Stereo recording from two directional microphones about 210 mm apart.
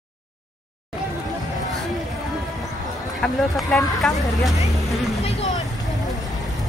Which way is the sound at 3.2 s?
Centre (ahead or behind).